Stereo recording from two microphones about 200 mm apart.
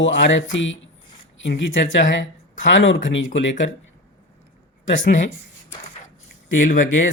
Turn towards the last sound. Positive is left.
turn(degrees=75)  # may be behind; listen again after turning